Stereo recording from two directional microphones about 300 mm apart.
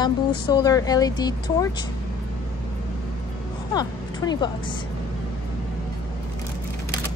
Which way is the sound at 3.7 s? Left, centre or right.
Centre.